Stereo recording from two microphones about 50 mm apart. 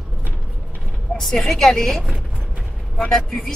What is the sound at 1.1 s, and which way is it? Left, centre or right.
Speech, centre.